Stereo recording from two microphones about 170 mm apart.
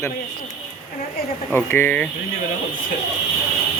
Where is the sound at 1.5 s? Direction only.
10° left (ahead or behind).